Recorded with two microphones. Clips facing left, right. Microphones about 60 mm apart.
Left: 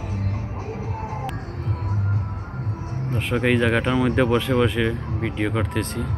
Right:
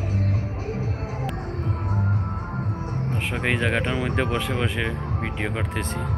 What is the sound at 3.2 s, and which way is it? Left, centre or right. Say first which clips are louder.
Speech: left 5 dB; centre.